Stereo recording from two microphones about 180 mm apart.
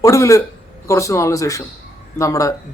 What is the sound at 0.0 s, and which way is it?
A man's voice, 15° left (ahead or behind).